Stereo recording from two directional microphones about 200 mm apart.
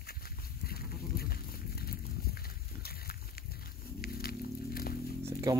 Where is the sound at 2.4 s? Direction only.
50° left (ahead or behind).